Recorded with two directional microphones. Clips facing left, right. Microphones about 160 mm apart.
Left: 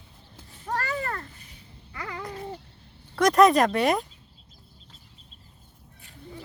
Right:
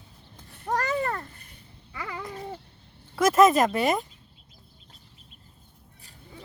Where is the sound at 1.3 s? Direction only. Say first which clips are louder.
Left 1 dB; 55° right (ahead or behind).